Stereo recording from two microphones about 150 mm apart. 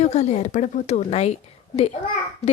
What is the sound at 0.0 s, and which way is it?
Speech, 50° left (ahead or behind).